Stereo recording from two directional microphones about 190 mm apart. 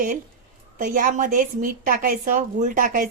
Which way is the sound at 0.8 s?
45° right (ahead or behind).